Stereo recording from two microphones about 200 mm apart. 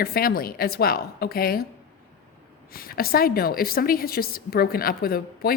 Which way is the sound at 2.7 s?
45° left (ahead or behind).